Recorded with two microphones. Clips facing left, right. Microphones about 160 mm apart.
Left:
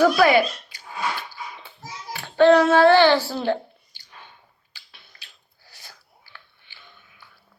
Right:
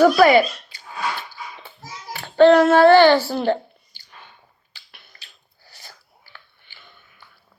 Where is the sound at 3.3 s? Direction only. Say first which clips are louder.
Right 3 dB; 15° right (ahead or behind).